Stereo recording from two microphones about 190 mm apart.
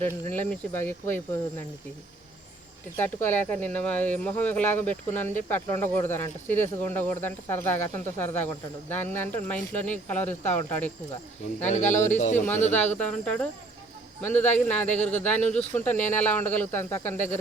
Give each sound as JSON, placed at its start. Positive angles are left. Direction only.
{"t": 0.3, "sound": "speech", "side_deg": 10}
{"t": 3.0, "sound": "speech", "side_deg": 10}
{"t": 11.7, "sound": "speech", "side_deg": 40}
{"t": 12.7, "sound": "speech", "side_deg": 5}